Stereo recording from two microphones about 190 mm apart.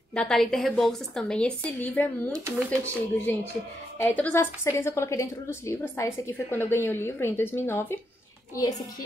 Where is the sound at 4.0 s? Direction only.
10° left (ahead or behind).